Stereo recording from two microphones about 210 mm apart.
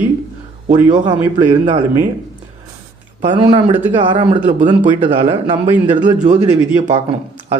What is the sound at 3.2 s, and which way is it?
A man's voice, 25° right (ahead or behind).